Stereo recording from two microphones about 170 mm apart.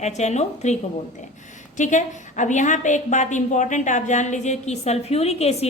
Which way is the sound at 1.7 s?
45° left (ahead or behind).